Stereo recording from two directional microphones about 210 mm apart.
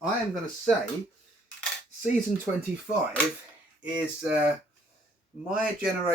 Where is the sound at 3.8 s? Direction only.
5° right (ahead or behind).